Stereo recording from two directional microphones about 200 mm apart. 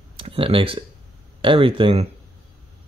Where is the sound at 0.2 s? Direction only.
25° right (ahead or behind).